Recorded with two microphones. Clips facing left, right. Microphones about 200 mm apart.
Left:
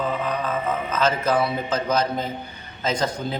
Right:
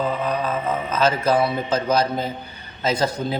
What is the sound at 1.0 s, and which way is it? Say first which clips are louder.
Speech: right 3 dB; 10° right (ahead or behind).